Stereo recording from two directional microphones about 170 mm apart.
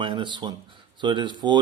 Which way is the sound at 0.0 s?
30° right (ahead or behind).